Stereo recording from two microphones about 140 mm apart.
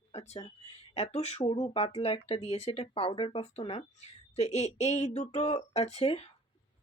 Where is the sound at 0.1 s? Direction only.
50° left (ahead or behind).